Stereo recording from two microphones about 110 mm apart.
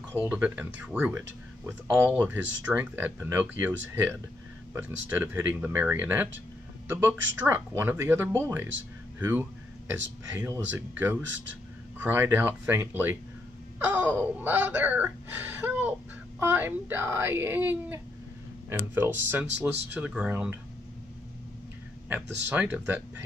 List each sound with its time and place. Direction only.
0.3 s speech: 15° right (ahead or behind)
22.1 s speech: 15° right (ahead or behind)